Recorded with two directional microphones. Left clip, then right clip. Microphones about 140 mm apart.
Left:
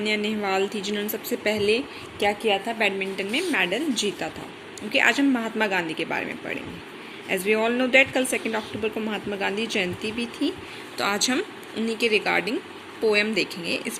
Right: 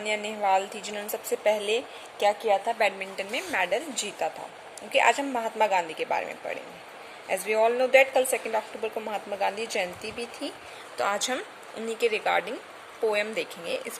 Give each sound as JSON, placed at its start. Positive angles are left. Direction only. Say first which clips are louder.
{"t": 0.0, "sound": "a woman's voice", "louder": "left 2 dB", "side_deg": -15}